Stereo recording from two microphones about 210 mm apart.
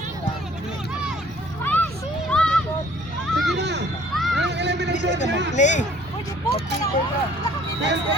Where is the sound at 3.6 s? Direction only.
55° right (ahead or behind).